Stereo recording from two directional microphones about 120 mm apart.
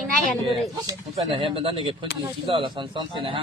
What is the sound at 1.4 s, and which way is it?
A man's voice, 45° right (ahead or behind).